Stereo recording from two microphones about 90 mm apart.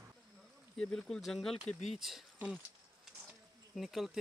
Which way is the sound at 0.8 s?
10° left (ahead or behind).